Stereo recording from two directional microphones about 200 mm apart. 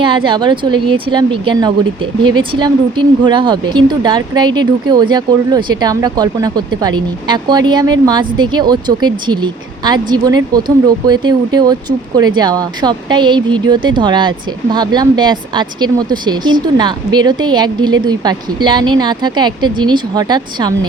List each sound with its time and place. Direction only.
0.0 s speech: 25° right (ahead or behind)